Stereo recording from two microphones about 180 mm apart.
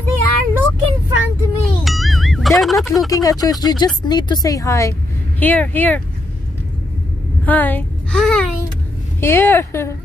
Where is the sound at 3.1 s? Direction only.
20° left (ahead or behind).